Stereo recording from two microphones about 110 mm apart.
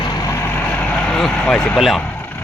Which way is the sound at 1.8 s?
Centre (ahead or behind).